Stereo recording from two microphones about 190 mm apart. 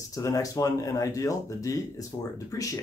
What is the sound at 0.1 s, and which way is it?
Speech, 15° left (ahead or behind).